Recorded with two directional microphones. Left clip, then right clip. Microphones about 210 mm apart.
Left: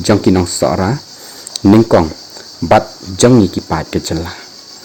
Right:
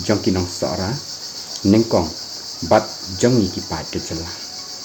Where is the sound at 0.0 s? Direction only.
45° left (ahead or behind).